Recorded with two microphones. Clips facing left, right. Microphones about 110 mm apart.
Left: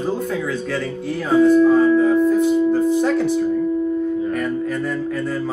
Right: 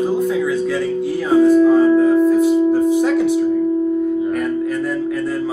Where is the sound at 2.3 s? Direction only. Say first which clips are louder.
Right 3 dB; 5° right (ahead or behind).